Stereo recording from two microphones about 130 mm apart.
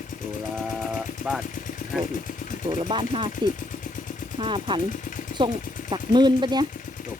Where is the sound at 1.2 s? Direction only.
90° left.